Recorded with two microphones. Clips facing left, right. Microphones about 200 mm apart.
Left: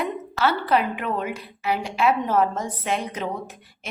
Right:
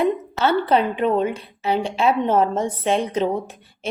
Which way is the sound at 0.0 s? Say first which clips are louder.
Right 4 dB; 25° right (ahead or behind).